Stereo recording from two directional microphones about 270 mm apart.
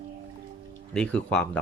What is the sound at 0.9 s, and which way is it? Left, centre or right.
Speech, centre.